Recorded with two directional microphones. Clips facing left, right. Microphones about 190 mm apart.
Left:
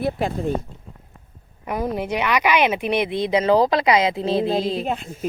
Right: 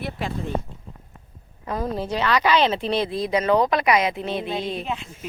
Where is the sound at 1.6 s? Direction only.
15° left (ahead or behind).